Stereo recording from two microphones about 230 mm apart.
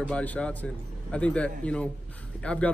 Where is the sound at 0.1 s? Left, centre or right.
Centre.